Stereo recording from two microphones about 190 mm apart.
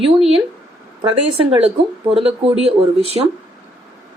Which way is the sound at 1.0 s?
30° right (ahead or behind).